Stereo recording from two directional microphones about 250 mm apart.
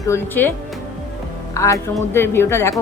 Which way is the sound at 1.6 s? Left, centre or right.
Centre.